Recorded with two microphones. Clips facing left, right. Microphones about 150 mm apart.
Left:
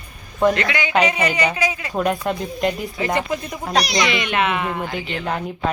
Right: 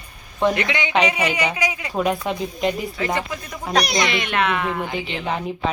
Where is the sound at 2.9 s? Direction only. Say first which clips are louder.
Left 3 dB; 20° left (ahead or behind).